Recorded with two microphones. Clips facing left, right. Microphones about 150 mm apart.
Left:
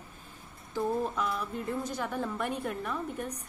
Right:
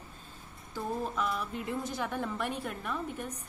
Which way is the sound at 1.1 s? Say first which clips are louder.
Left 1 dB; 5° right (ahead or behind).